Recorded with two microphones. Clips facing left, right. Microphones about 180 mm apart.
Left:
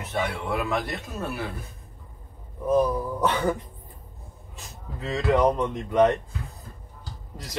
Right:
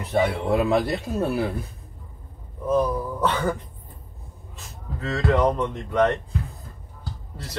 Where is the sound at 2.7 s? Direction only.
15° left (ahead or behind).